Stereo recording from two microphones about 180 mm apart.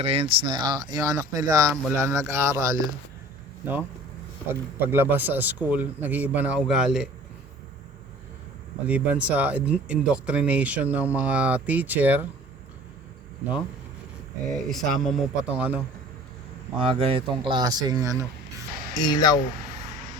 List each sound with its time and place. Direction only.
0.0 s speech: 35° right (ahead or behind); by 7.1 s 5° right (ahead or behind)
8.9 s speech: 10° right (ahead or behind)
14.5 s speech: centre (ahead or behind)
16.9 s speech: 30° right (ahead or behind)
18.9 s speech: 25° left (ahead or behind)